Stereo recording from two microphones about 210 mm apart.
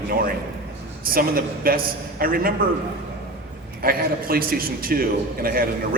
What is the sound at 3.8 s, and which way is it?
A man's voice, 45° right (ahead or behind).